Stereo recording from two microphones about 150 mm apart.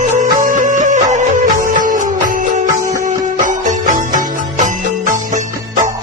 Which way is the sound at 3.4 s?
60° right (ahead or behind).